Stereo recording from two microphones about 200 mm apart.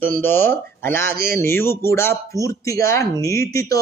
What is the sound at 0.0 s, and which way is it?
Speech, 10° left (ahead or behind).